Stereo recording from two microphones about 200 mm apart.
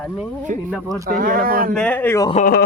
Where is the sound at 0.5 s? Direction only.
40° right (ahead or behind).